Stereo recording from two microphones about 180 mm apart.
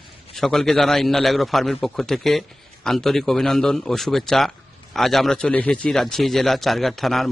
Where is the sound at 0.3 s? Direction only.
Centre (ahead or behind).